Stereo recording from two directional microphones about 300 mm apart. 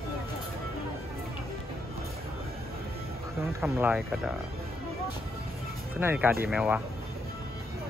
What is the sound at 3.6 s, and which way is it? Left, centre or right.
Speech, centre.